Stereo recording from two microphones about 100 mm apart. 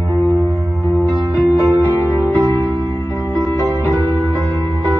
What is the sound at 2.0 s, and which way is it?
Music, 30° left (ahead or behind).